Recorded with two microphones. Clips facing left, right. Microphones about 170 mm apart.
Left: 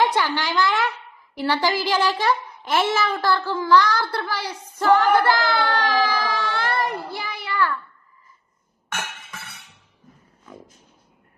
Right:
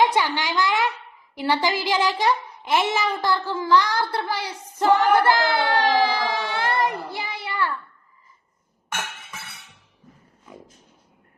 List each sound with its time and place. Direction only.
0.0 s a woman's voice: 15° right (ahead or behind)